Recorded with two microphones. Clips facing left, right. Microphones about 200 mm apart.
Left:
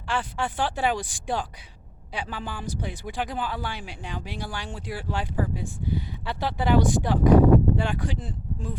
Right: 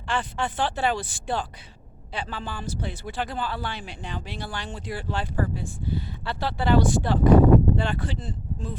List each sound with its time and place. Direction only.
0.1 s speech: 10° left (ahead or behind)